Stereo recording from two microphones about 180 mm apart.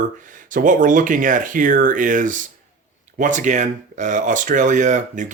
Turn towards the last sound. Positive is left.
turn(degrees=-45)  # may be behind; listen again after turning